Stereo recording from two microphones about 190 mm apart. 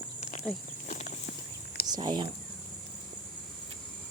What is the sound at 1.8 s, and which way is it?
Speech, 20° right (ahead or behind).